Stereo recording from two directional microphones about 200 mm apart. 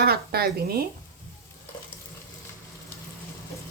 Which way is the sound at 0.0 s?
50° right (ahead or behind).